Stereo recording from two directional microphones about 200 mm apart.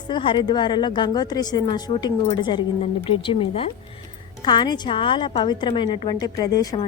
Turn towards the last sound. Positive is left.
turn(degrees=20)  # may be behind; listen again after turning